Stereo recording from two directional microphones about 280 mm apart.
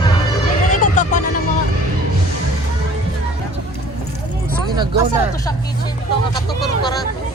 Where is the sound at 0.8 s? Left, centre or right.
Left.